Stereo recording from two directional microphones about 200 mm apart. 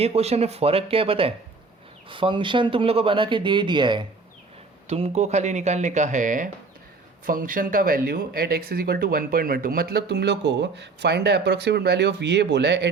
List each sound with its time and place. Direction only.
0.0 s speech: 30° right (ahead or behind); by 12.9 s 60° right (ahead or behind)